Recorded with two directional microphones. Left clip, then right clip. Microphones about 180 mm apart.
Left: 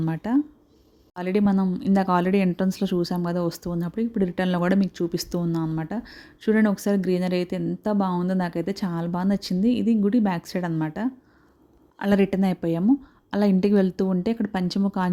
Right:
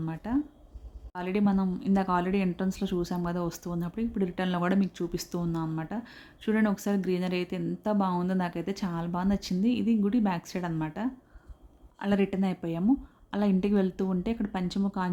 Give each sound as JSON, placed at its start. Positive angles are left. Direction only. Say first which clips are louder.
{"t": 0.0, "sound": "speech", "louder": "left 7 dB", "side_deg": 35}